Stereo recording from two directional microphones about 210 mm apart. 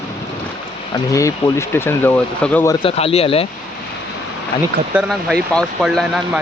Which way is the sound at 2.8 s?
30° left (ahead or behind).